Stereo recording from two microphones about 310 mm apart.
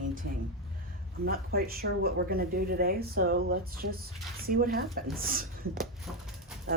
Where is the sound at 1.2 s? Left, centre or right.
Right.